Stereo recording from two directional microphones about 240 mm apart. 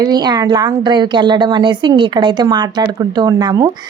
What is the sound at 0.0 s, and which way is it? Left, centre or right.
A woman's voice, centre.